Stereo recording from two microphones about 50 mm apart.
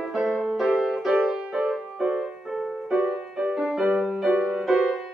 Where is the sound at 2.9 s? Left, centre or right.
Right.